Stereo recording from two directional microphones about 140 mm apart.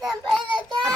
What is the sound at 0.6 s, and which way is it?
Speech, 30° right (ahead or behind).